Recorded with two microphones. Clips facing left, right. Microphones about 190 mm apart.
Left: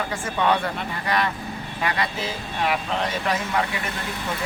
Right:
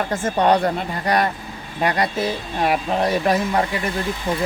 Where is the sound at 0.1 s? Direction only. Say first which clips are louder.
Right 6 dB; 45° right (ahead or behind).